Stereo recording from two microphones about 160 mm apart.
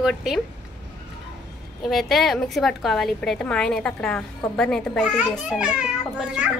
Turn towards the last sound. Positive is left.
turn(degrees=-5)  # may be behind; listen again after turning